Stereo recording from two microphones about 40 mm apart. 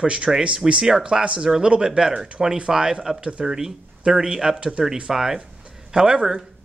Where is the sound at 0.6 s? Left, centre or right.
Centre.